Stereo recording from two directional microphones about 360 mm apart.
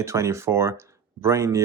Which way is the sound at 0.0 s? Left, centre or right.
Centre.